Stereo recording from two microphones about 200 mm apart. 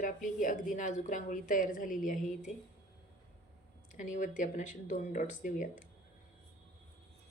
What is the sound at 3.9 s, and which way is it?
Speech, 40° left (ahead or behind).